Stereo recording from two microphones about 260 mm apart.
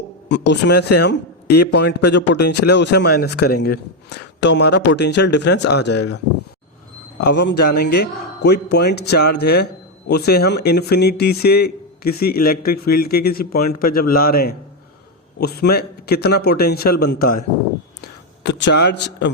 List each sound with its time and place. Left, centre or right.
0.3 s a man's voice: left
7.2 s a man's voice: left
18.0 s a sound: left